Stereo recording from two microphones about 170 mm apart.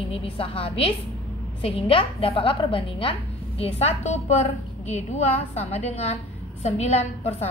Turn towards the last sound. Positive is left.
turn(degrees=40)  # may be behind; listen again after turning